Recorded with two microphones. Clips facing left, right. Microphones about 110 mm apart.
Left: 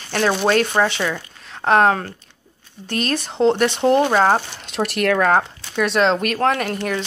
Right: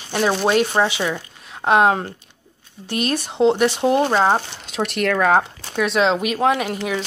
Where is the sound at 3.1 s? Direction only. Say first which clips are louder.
Even; 10° right (ahead or behind).